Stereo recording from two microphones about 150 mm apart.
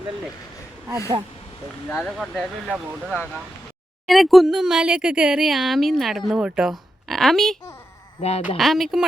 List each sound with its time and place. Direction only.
0.9 s speech: 20° right (ahead or behind)
2.0 s speech: centre (ahead or behind)
8.2 s speech: 45° left (ahead or behind)
8.5 s speech: centre (ahead or behind)